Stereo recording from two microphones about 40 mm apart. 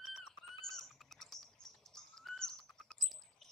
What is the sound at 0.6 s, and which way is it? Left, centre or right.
Bird, centre.